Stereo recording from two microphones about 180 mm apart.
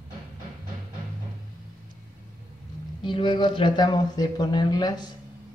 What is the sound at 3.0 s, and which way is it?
Speech, 25° left (ahead or behind).